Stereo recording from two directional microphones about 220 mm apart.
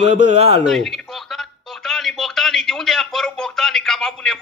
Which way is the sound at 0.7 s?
Centre (ahead or behind).